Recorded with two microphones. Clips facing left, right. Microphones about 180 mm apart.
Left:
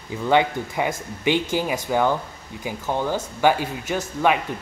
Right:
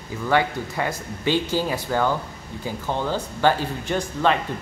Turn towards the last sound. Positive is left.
turn(degrees=10)  # may be behind; listen again after turning